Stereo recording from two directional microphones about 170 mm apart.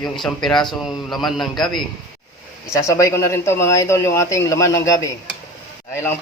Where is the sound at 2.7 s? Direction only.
20° left (ahead or behind).